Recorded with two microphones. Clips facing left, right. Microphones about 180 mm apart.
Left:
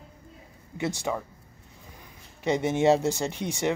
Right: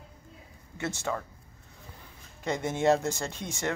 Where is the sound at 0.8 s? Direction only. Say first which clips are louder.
Left 3 dB; 15° left (ahead or behind).